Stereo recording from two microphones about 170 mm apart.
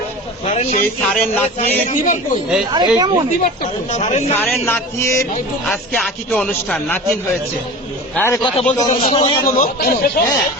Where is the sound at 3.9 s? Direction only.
45° left (ahead or behind).